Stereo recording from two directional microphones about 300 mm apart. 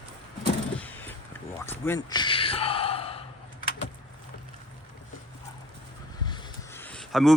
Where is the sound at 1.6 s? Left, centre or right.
Centre.